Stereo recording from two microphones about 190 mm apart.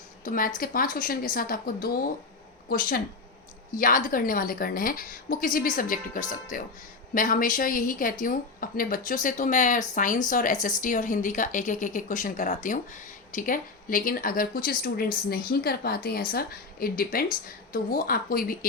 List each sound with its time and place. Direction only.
0.3 s a woman's voice: 45° left (ahead or behind)